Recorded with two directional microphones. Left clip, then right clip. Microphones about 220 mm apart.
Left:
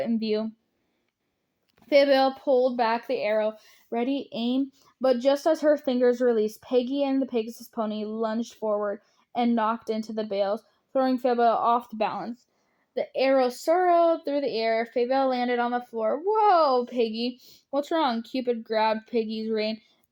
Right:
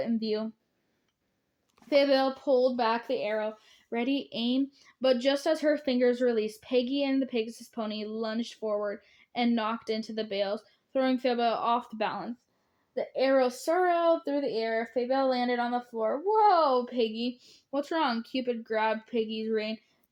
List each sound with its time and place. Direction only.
0.0 s speech: 30° left (ahead or behind)
1.9 s speech: 30° left (ahead or behind)
7.4 s a woman's voice: 5° right (ahead or behind)
7.7 s speech: 30° left (ahead or behind)